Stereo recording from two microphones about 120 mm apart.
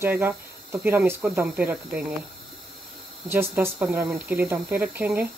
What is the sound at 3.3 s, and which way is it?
Speech, 20° right (ahead or behind).